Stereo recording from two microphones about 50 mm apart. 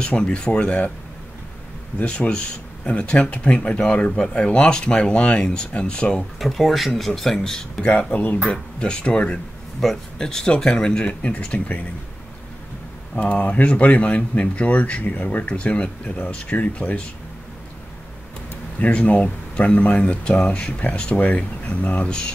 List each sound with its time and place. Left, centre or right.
0.0 s speech: left
2.0 s speech: centre
6.4 s speech: centre
8.1 s speech: left
8.5 s speech: centre
9.8 s speech: centre; by 11.8 s left
13.2 s speech: left
18.8 s speech: left